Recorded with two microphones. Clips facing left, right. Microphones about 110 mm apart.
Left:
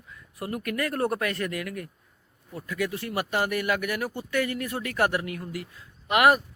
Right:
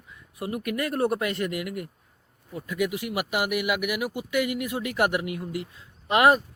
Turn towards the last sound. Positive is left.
turn(degrees=-25)  # may be behind; listen again after turning